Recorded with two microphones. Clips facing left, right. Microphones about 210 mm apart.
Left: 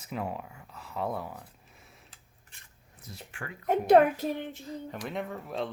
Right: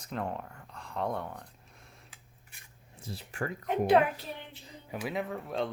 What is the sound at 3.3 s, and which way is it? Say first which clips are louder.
Speech: right 8 dB; 40° right (ahead or behind).